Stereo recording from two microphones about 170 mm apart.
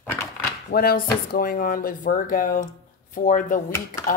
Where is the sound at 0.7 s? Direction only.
60° left (ahead or behind).